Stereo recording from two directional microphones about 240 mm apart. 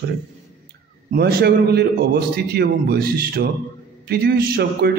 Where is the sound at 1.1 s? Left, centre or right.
Right.